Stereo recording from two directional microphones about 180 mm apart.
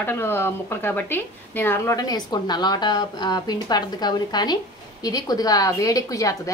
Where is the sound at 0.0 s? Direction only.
15° left (ahead or behind).